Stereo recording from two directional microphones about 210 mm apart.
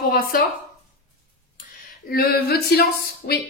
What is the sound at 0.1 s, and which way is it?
Speech, 45° left (ahead or behind).